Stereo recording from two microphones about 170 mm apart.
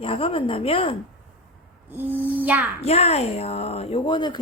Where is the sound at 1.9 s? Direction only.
10° right (ahead or behind).